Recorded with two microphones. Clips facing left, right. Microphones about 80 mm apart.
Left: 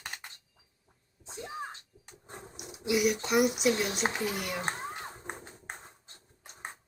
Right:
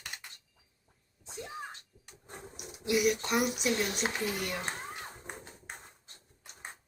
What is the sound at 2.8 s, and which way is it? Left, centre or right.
Speech, centre.